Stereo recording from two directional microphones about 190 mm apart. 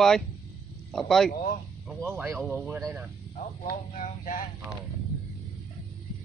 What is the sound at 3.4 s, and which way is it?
Speech, 40° left (ahead or behind).